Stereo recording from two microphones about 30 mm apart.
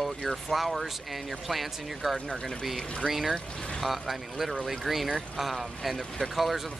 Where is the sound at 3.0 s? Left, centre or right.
Centre.